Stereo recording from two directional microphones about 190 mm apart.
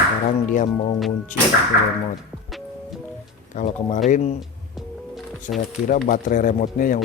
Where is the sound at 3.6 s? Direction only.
40° left (ahead or behind).